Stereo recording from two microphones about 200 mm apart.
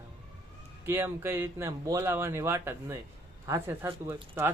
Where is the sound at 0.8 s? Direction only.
10° right (ahead or behind).